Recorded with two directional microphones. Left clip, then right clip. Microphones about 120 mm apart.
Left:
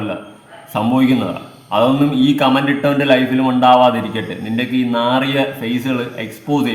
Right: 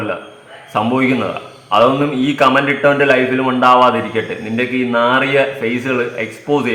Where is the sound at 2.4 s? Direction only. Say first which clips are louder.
Right 3 dB; 15° left (ahead or behind).